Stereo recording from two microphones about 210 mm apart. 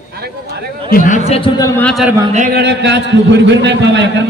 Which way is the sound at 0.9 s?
40° left (ahead or behind).